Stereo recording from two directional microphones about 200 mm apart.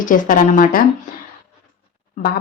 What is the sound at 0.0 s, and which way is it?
Speech, 40° left (ahead or behind).